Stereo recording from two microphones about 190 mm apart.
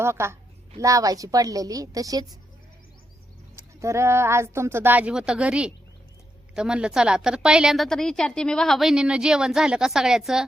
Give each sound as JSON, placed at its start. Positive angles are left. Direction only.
{"t": 0.0, "sound": "a woman's voice", "side_deg": -15}
{"t": 3.5, "sound": "a woman's voice", "side_deg": -15}